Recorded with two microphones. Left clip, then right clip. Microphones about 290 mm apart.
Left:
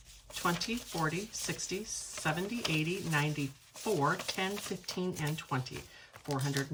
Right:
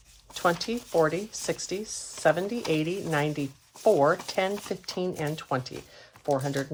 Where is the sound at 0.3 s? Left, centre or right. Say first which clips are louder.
Right 7 dB; centre.